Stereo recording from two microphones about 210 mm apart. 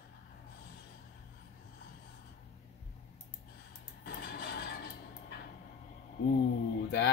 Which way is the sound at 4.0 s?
50° left (ahead or behind).